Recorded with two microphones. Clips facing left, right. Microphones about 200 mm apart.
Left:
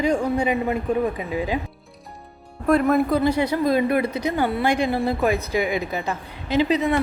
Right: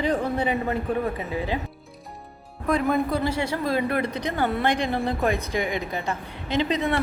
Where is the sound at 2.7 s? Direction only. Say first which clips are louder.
Left 5 dB; 5° left (ahead or behind).